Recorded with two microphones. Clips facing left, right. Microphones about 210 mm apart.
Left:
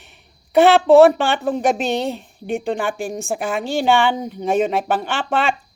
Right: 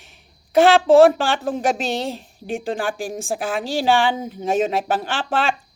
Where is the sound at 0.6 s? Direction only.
Centre (ahead or behind).